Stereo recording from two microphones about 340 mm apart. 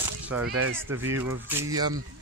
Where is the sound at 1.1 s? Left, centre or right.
Centre.